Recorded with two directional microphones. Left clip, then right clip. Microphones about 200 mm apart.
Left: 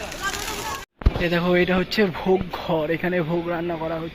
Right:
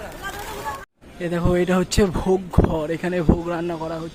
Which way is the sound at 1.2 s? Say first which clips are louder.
Left 1 dB; 15° right (ahead or behind).